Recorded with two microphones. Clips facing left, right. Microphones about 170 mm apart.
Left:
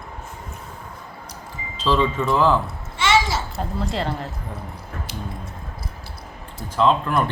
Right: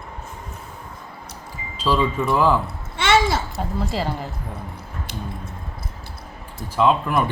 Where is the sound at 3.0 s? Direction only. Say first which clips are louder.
Right 2 dB; 55° right (ahead or behind).